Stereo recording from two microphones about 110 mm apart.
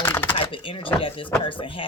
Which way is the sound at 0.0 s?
20° left (ahead or behind).